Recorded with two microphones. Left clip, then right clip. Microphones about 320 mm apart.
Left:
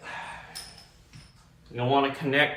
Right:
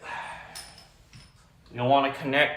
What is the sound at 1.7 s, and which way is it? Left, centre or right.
Speech, right.